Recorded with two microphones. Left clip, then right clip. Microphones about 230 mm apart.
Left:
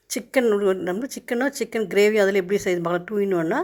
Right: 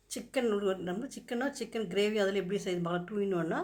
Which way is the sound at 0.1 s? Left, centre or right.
Left.